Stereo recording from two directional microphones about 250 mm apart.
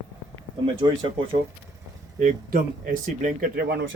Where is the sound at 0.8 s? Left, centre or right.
Centre.